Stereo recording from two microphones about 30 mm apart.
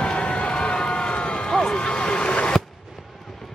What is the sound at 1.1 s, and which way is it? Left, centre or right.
Vehicle, left.